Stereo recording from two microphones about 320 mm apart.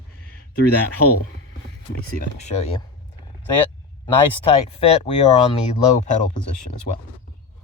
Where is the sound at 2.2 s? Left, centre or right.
Left.